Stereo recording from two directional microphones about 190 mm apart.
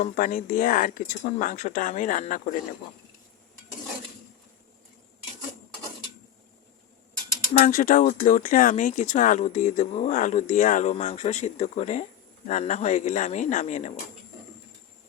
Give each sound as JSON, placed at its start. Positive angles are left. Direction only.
{"t": 0.0, "sound": "speech", "side_deg": 45}
{"t": 7.5, "sound": "speech", "side_deg": 45}